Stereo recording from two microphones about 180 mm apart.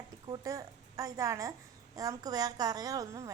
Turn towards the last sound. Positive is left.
turn(degrees=-20)  # may be behind; listen again after turning